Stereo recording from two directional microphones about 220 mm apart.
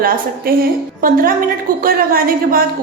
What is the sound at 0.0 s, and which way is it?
A woman's voice, 40° right (ahead or behind).